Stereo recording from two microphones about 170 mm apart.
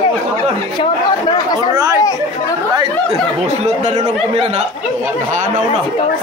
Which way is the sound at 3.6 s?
40° right (ahead or behind).